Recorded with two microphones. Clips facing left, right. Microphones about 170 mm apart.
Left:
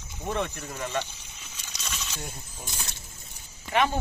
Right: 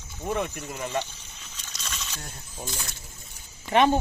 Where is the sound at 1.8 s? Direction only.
10° left (ahead or behind).